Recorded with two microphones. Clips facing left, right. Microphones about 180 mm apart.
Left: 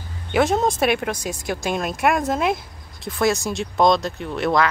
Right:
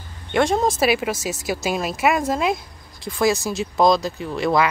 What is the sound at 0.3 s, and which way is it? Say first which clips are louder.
Speech: even; centre (ahead or behind).